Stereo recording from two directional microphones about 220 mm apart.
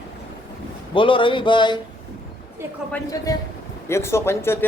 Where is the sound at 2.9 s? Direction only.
15° left (ahead or behind).